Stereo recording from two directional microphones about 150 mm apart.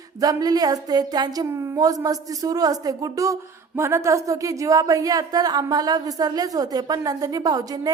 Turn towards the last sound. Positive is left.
turn(degrees=-25)  # may be behind; listen again after turning